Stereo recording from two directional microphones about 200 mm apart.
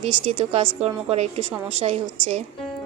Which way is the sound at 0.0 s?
30° right (ahead or behind).